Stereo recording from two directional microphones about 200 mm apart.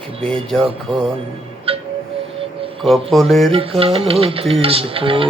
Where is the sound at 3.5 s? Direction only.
30° right (ahead or behind).